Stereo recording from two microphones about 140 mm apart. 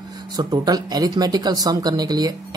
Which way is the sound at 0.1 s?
30° right (ahead or behind).